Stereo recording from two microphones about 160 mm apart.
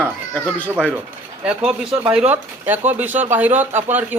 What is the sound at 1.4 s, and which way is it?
Speech, 5° right (ahead or behind).